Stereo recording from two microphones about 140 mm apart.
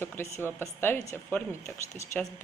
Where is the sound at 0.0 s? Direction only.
15° left (ahead or behind).